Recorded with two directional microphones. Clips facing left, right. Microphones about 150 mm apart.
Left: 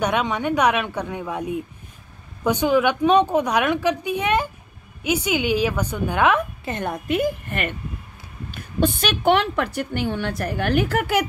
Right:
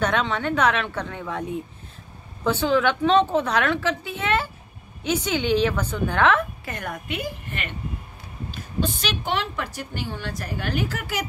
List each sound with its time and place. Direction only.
0.0 s a woman's voice: 15° left (ahead or behind)
7.1 s a woman's voice: 50° left (ahead or behind)